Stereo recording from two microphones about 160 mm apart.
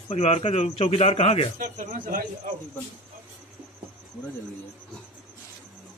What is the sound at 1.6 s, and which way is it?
Speech, 55° right (ahead or behind).